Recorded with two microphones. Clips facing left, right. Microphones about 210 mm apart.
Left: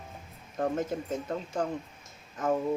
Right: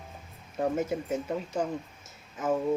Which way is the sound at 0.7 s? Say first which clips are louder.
Right 2 dB; 10° right (ahead or behind).